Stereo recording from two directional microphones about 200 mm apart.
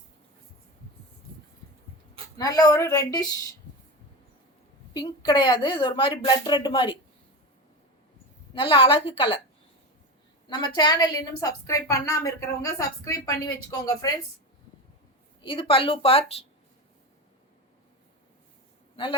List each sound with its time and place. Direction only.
2.4 s a woman's voice: 20° left (ahead or behind)
4.9 s a woman's voice: 20° left (ahead or behind)
8.5 s a woman's voice: 25° left (ahead or behind)
10.4 s a woman's voice: 20° left (ahead or behind)
15.4 s a woman's voice: 25° left (ahead or behind)